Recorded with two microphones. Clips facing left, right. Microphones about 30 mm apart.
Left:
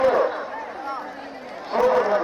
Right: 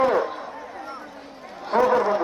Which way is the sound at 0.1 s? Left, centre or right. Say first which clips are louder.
Left 3 dB; centre.